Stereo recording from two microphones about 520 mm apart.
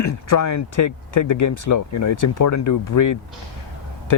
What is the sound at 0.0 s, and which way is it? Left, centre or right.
Speech, left.